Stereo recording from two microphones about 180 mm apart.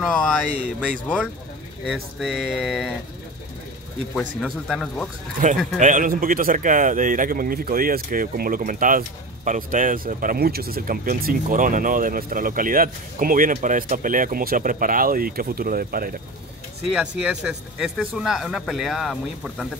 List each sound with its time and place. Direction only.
0.0 s speech: 5° left (ahead or behind)
4.1 s speech: 5° left (ahead or behind)
5.4 s speech: 45° right (ahead or behind)
17.2 s speech: 5° right (ahead or behind)